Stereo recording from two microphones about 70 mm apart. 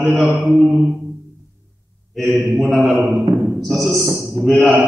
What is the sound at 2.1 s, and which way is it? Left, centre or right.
A man's voice, centre.